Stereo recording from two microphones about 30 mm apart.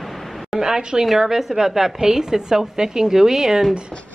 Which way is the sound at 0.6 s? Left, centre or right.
Right.